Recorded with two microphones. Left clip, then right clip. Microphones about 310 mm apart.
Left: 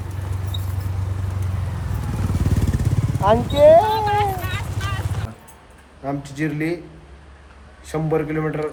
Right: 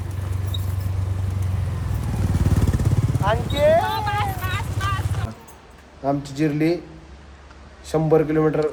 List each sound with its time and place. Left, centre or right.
0.0 s vehicle: centre
6.1 s a man's voice: centre
7.9 s a man's voice: centre